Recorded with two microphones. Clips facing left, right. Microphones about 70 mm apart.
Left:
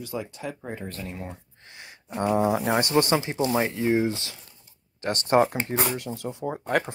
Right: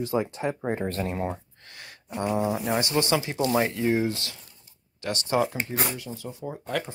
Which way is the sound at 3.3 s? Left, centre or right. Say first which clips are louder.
Even; left.